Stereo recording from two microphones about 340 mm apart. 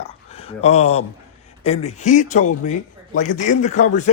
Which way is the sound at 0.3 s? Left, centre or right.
Centre.